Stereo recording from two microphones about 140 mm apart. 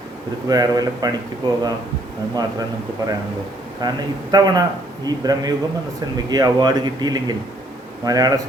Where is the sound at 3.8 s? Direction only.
30° right (ahead or behind).